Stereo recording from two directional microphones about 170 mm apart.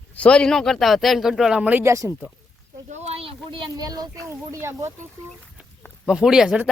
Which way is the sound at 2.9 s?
40° right (ahead or behind).